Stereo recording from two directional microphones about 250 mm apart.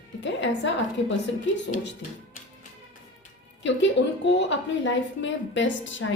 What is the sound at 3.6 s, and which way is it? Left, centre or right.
A woman's voice, left.